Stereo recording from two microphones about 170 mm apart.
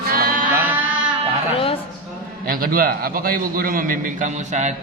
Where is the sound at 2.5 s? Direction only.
60° right (ahead or behind).